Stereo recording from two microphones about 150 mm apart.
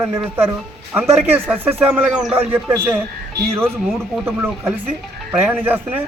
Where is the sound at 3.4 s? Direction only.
90° right.